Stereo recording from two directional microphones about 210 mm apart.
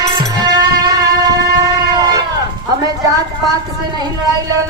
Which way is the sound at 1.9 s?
20° right (ahead or behind).